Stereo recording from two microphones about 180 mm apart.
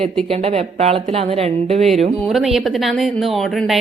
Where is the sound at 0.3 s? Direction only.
35° right (ahead or behind).